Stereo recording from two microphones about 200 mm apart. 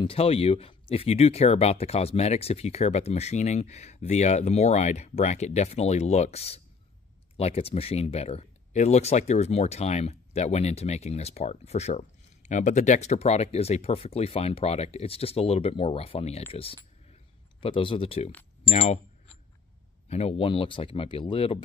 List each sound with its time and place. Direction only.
0.0 s speech: 30° left (ahead or behind)
17.1 s a sound: 25° left (ahead or behind)
18.7 s speech: 30° left (ahead or behind)